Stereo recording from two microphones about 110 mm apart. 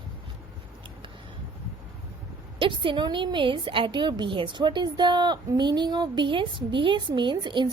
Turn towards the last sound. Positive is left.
turn(degrees=-45)  # may be behind; listen again after turning